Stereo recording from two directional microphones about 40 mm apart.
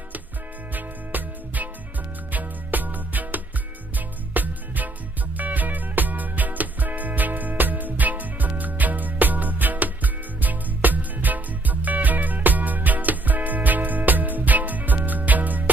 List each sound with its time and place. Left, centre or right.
0.7 s music: right